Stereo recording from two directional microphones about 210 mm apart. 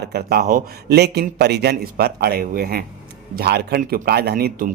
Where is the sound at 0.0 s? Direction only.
50° right (ahead or behind).